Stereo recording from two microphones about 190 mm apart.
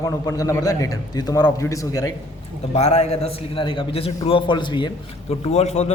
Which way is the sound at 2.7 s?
35° left (ahead or behind).